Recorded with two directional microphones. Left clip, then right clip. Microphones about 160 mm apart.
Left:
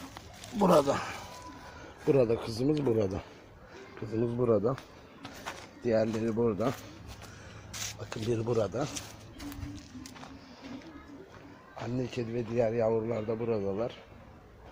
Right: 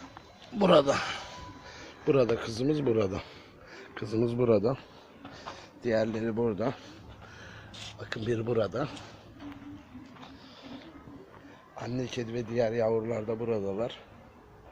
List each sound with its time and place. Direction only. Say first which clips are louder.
0.6 s speech: right 2 dB; 5° right (ahead or behind)
4.0 s speech: right 2 dB; 20° right (ahead or behind)
5.5 s a sound: even; 10° left (ahead or behind)
6.1 s speech: even; 5° left (ahead or behind)
7.9 s speech: right 2 dB; centre (ahead or behind)
11.8 s speech: even; centre (ahead or behind)